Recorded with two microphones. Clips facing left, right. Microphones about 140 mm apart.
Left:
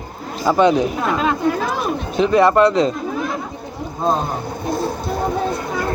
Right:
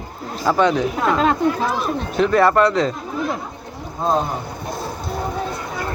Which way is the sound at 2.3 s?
15° left (ahead or behind).